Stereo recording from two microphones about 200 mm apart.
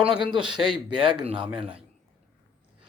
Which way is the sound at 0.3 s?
25° right (ahead or behind).